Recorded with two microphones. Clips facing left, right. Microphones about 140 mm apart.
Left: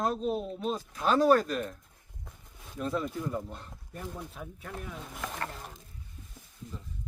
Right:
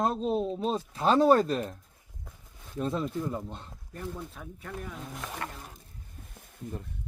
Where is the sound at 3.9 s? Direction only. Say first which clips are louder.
Right 2 dB; centre (ahead or behind).